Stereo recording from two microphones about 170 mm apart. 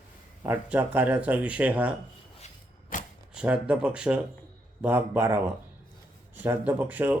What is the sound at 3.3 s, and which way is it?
Speech, 5° right (ahead or behind).